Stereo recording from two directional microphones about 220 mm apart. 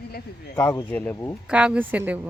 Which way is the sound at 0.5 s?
10° left (ahead or behind).